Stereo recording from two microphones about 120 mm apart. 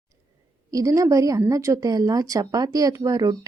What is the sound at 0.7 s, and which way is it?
A woman's voice, 30° right (ahead or behind).